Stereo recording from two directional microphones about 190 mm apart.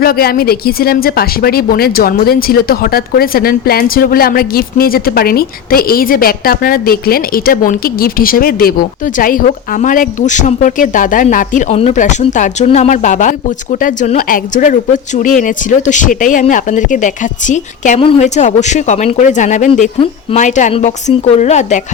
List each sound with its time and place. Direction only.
0.0 s speech: 50° left (ahead or behind)